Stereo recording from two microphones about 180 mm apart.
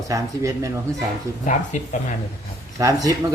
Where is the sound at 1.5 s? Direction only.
45° left (ahead or behind).